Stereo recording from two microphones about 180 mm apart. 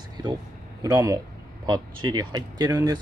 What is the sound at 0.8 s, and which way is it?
Speech, 20° right (ahead or behind).